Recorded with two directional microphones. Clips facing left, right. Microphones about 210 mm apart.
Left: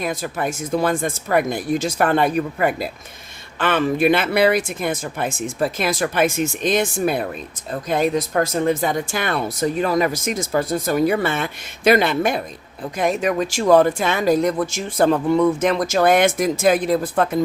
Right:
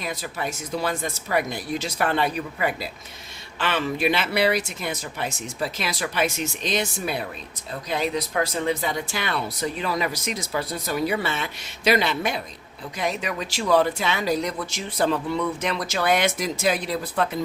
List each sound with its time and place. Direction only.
0.0 s speech: 50° left (ahead or behind)